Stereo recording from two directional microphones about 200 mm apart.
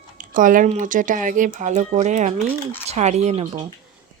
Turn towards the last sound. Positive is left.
turn(degrees=-35)  # may be behind; listen again after turning